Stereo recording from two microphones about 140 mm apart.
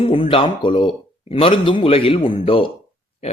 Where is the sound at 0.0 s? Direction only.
40° left (ahead or behind).